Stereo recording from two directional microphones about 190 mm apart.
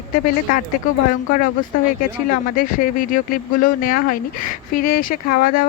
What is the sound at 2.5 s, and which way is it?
Speech, 45° left (ahead or behind).